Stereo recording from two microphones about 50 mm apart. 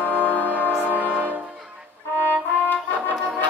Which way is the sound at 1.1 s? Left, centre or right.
Right.